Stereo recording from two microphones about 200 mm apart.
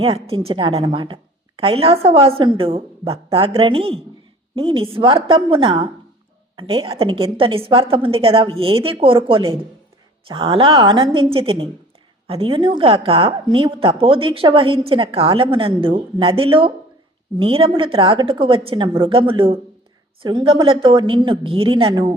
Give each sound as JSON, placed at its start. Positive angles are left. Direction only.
{"t": 0.0, "sound": "a woman's voice", "side_deg": -30}